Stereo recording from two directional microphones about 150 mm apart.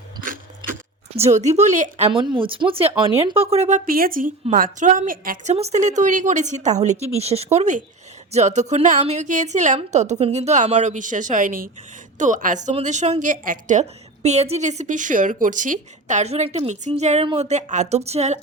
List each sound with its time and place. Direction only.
0.2 s a sound: 65° right (ahead or behind)
1.1 s a woman's voice: 45° right (ahead or behind)
2.3 s speech: 35° right (ahead or behind); by 4.3 s 70° right (ahead or behind)
4.5 s a woman's voice: 60° right (ahead or behind)
5.5 s a woman's voice: 50° right (ahead or behind)